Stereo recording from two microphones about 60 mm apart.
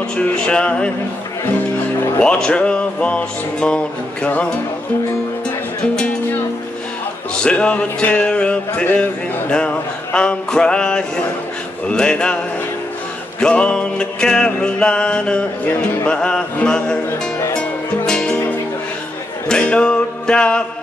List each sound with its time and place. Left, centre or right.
0.1 s music: centre
2.2 s music: centre
5.8 s speech: centre
7.3 s a man's voice: centre
10.1 s music: centre
13.4 s music: centre
18.3 s music: left
19.4 s music: centre